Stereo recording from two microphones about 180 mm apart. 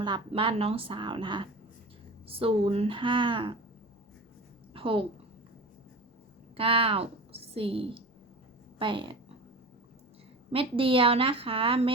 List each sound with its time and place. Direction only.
0.0 s a woman's voice: 30° right (ahead or behind)
4.7 s a sound: 30° right (ahead or behind)
6.6 s a woman's voice: 30° right (ahead or behind)
10.5 s a woman's voice: 30° right (ahead or behind)